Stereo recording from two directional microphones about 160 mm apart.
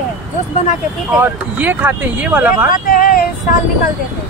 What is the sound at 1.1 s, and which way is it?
Speech, 10° right (ahead or behind).